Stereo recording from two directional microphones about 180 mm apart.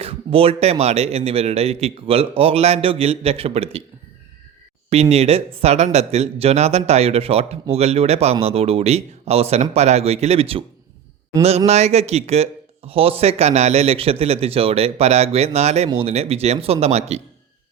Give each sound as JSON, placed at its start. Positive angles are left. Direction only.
{"t": 0.0, "sound": "a man's voice", "side_deg": -30}
{"t": 4.9, "sound": "a man's voice", "side_deg": -35}